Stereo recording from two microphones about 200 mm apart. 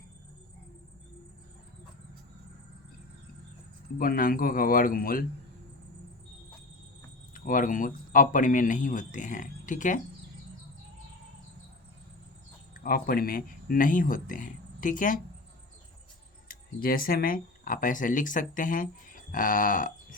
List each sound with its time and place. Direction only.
3.9 s speech: 45° left (ahead or behind)
7.3 s speech: 40° left (ahead or behind)
12.8 s speech: 45° left (ahead or behind)
16.5 s speech: 45° left (ahead or behind)